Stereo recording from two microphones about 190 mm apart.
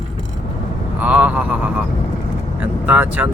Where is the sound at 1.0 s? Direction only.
5° right (ahead or behind).